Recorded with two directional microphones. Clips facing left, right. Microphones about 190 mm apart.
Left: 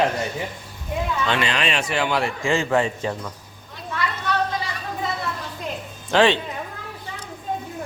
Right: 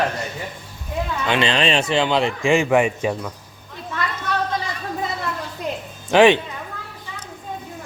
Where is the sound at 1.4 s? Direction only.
30° right (ahead or behind).